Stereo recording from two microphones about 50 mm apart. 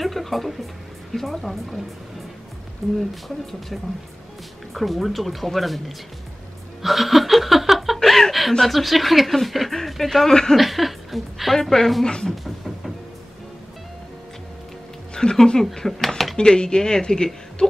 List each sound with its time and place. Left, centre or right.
0.0 s speech: centre
3.0 s speech: centre
6.8 s laughter: centre
8.0 s chuckle: centre
8.5 s speech: centre
10.6 s a woman's voice: centre
12.4 s music: centre
15.1 s a woman's voice: centre
16.3 s a woman's voice: centre